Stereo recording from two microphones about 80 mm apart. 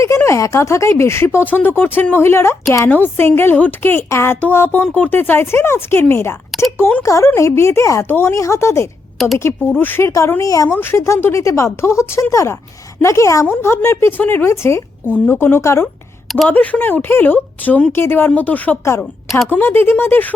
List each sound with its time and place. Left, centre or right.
0.3 s speech: left
10.4 s speech: left
10.7 s speech: left
16.5 s speech: left